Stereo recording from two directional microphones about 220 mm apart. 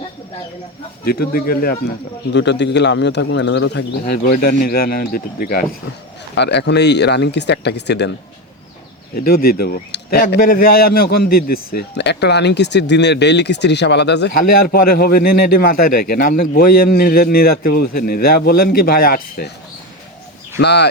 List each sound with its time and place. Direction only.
1.0 s a man's voice: 45° left (ahead or behind)
9.1 s a man's voice: 40° left (ahead or behind)
20.6 s a man's voice: 50° left (ahead or behind)